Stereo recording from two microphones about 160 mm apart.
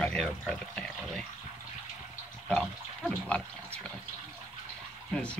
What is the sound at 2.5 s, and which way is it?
Speech, 5° left (ahead or behind).